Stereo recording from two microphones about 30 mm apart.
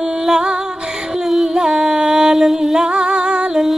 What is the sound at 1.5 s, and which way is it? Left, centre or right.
Music, centre.